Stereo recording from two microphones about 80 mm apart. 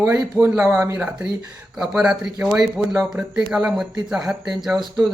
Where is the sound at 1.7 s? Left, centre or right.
Centre.